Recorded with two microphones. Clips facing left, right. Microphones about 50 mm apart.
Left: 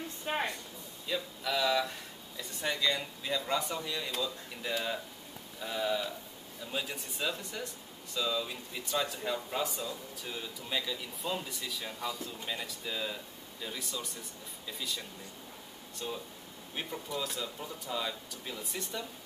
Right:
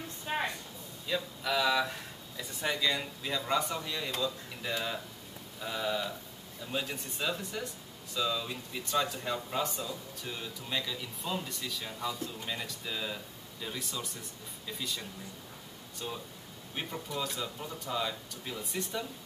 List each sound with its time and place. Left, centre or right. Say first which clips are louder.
1.0 s speech: right 2 dB; centre
16.7 s speech: right 1 dB; centre